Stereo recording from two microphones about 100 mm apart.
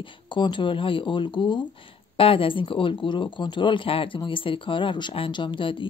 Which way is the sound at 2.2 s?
65° left (ahead or behind).